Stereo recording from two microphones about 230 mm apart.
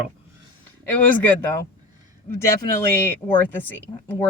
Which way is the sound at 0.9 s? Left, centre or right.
Centre.